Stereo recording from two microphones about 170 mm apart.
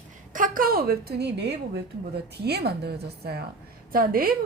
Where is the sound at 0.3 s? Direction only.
55° right (ahead or behind); by 3.4 s 70° right (ahead or behind).